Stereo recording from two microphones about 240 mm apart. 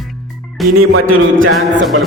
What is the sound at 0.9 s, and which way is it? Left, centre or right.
Speech, right.